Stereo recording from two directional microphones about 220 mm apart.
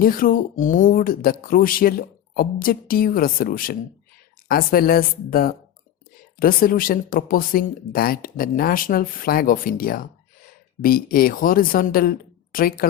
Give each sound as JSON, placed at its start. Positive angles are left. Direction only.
{"t": 0.0, "sound": "speech", "side_deg": 40}